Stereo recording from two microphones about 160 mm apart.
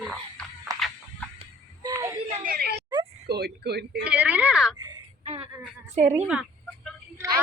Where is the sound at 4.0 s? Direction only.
10° right (ahead or behind).